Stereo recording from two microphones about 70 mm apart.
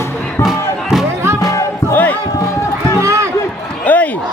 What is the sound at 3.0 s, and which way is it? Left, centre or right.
Run, right.